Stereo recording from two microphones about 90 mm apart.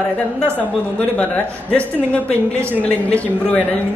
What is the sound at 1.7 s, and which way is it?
Speech, 15° left (ahead or behind).